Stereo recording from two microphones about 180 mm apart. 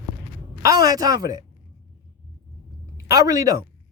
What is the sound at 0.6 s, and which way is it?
Speech, 20° right (ahead or behind).